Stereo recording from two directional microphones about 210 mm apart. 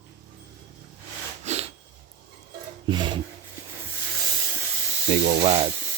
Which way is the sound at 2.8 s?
20° right (ahead or behind).